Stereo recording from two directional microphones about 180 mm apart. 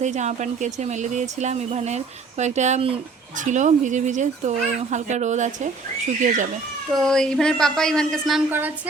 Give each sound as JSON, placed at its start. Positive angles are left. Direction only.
{"t": 0.0, "sound": "speech", "side_deg": -40}
{"t": 6.9, "sound": "speech", "side_deg": 5}
{"t": 8.4, "sound": "speech", "side_deg": -10}